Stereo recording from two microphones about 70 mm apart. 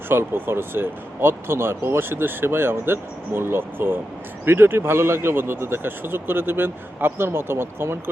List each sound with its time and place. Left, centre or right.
0.1 s speech: right